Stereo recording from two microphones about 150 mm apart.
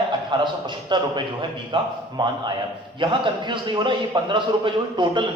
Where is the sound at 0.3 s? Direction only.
30° right (ahead or behind).